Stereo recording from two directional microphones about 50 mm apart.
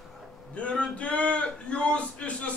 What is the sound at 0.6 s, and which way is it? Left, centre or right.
Male singing, left.